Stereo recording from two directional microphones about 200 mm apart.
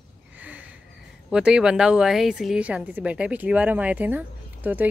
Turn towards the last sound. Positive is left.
turn(degrees=-10)  # may be behind; listen again after turning